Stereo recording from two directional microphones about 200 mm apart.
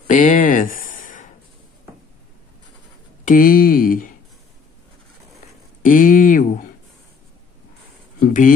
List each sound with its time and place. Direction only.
0.1 s a sound: 40° left (ahead or behind)
3.3 s speech: 45° left (ahead or behind)
5.8 s speech: 40° left (ahead or behind)
8.2 s speech: 40° left (ahead or behind)